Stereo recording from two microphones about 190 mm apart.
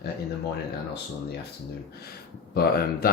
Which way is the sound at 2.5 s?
55° left (ahead or behind).